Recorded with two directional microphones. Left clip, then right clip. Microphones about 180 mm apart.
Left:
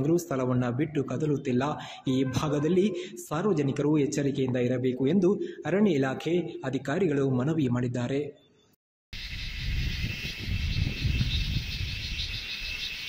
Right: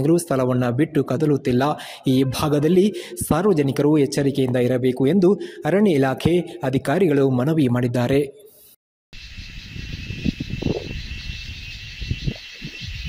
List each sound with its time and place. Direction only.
0.0 s speech: 35° right (ahead or behind)